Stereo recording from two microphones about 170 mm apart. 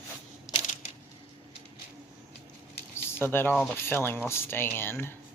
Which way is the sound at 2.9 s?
15° left (ahead or behind).